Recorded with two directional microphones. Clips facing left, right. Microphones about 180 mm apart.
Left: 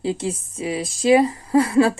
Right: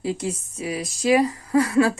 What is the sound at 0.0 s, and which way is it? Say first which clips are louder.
Speech: left 2 dB; 30° left (ahead or behind).